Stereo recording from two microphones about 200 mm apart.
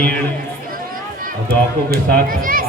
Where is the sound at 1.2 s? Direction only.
50° right (ahead or behind).